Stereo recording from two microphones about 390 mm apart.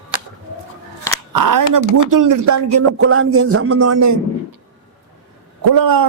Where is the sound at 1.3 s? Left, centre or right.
Right.